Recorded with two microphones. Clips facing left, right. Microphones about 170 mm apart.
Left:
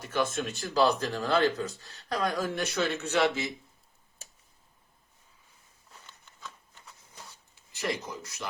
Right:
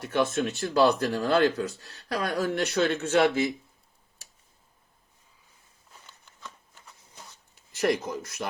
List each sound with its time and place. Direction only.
0.0 s speech: 65° right (ahead or behind); by 3.5 s 50° right (ahead or behind)
7.8 s speech: 55° right (ahead or behind)